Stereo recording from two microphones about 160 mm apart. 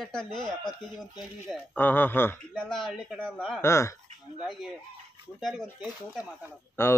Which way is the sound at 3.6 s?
15° left (ahead or behind).